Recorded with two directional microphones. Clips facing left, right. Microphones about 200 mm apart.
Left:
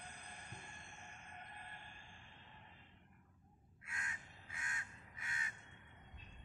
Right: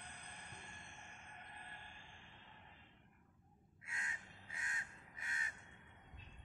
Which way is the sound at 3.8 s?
30° right (ahead or behind).